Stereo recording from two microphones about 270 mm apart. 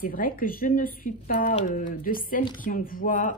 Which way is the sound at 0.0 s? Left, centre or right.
Left.